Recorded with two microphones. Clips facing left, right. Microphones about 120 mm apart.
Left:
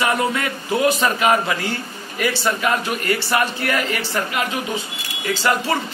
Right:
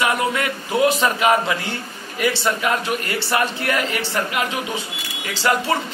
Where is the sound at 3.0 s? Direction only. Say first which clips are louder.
Left 2 dB; 25° right (ahead or behind).